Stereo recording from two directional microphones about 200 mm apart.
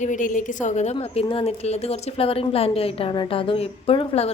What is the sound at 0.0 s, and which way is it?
A woman's voice, 40° left (ahead or behind).